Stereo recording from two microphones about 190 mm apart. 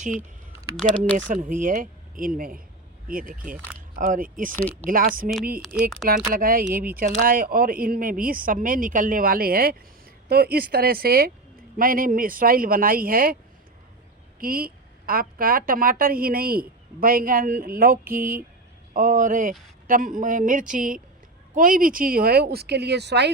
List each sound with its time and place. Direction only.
1.1 s a woman's voice: 45° right (ahead or behind)
4.5 s speech: 10° left (ahead or behind)
4.9 s a woman's voice: 45° right (ahead or behind)
14.3 s a woman's voice: 50° right (ahead or behind)